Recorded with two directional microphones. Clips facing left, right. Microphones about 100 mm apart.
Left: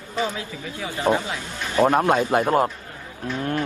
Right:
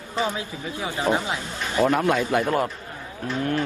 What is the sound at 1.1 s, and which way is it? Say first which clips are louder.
Speech: left 3 dB; 40° left (ahead or behind).